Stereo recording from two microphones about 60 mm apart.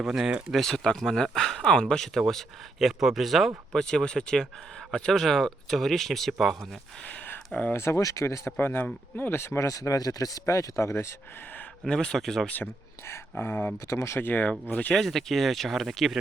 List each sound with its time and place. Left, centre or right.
0.0 s speech: centre
0.5 s speech: centre
3.8 s speech: centre
7.7 s speech: left
8.5 s speech: left
9.6 s speech: left
10.4 s speech: left
11.9 s speech: centre
13.4 s speech: left
13.8 s speech: left
14.2 s speech: left
14.9 s speech: centre